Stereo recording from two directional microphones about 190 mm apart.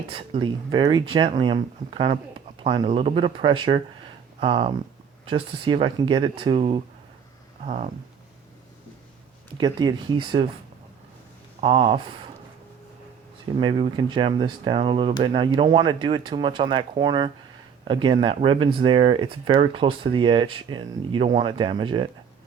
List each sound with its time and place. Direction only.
0.1 s speech: 25° right (ahead or behind)
9.6 s speech: 20° right (ahead or behind)
11.6 s speech: 30° right (ahead or behind)
13.6 s speech: 25° right (ahead or behind)